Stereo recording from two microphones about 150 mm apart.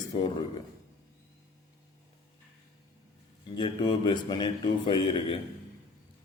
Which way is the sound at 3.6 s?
30° left (ahead or behind).